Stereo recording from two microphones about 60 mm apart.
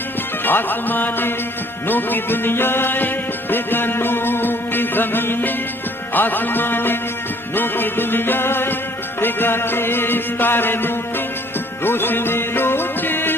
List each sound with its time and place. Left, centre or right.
0.4 s music: left